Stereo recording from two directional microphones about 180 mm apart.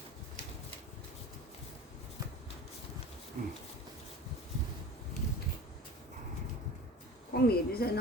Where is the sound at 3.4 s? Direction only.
50° right (ahead or behind).